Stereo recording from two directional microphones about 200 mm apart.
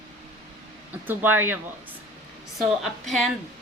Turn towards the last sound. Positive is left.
turn(degrees=0)  # may be behind; listen again after turning